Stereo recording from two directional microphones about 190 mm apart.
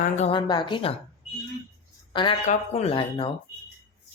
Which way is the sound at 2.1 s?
25° left (ahead or behind).